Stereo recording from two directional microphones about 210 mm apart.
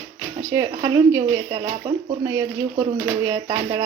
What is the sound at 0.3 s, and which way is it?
Speech, 15° right (ahead or behind).